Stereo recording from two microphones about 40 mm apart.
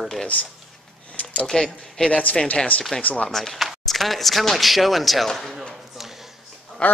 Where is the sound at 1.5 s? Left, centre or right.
Centre.